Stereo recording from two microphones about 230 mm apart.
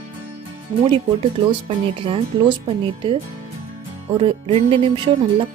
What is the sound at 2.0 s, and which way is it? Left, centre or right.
Speech, right.